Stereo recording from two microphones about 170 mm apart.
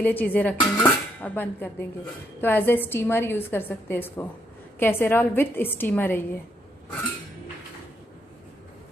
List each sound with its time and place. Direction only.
0.0 s a woman's voice: 10° left (ahead or behind)